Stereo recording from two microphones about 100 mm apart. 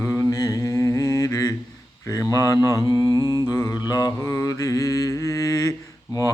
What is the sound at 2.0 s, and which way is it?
Mantra, 35° left (ahead or behind).